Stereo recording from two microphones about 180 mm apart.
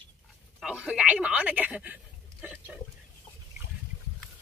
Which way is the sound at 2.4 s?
5° right (ahead or behind).